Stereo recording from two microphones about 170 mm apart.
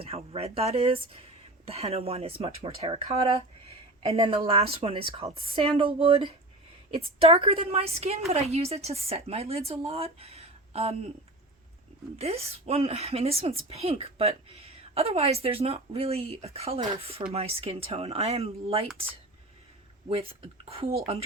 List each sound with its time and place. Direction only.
0.0 s a woman's voice: 35° right (ahead or behind)
12.1 s a woman's voice: 35° right (ahead or behind)
20.1 s a woman's voice: 35° right (ahead or behind)